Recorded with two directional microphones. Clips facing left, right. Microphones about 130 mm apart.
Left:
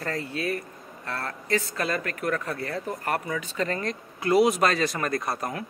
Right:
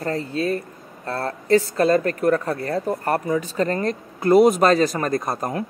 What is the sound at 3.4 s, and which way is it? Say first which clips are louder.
Speech: right 6 dB; 40° right (ahead or behind).